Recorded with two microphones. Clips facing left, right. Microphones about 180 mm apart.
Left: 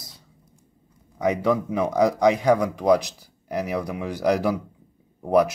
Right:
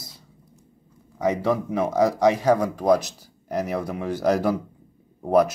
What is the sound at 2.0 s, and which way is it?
Speech, 15° left (ahead or behind).